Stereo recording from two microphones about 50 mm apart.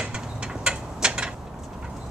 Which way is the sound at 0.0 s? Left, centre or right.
Centre.